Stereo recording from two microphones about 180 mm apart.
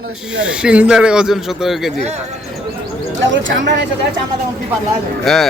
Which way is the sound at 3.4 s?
80° right.